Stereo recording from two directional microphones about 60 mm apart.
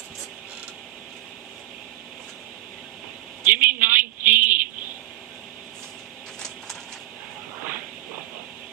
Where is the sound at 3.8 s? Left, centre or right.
Right.